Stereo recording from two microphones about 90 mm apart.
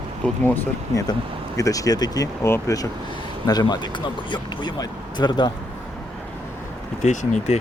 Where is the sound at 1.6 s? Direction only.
40° left (ahead or behind).